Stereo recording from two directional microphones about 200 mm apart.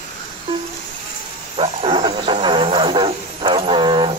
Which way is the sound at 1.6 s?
30° right (ahead or behind).